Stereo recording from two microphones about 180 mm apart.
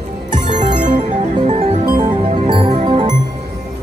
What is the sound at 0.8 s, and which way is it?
Music, 45° right (ahead or behind).